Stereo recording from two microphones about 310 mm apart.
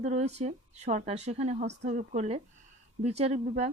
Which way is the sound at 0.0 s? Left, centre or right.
Right.